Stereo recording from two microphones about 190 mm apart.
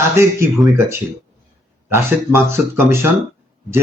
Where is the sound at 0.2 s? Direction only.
10° right (ahead or behind).